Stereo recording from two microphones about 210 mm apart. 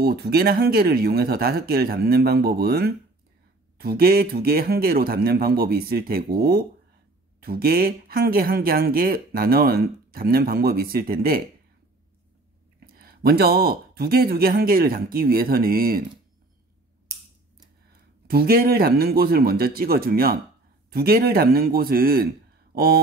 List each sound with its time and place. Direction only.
0.0 s speech: 50° right (ahead or behind)
12.8 s speech: 45° right (ahead or behind)
18.2 s speech: 45° right (ahead or behind)